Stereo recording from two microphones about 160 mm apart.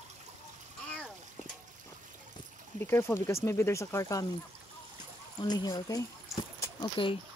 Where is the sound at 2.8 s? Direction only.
15° left (ahead or behind).